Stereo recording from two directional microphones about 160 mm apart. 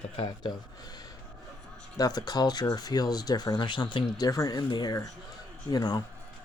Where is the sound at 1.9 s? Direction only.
25° left (ahead or behind).